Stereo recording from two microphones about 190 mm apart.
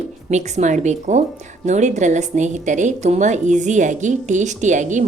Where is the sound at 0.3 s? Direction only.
35° right (ahead or behind).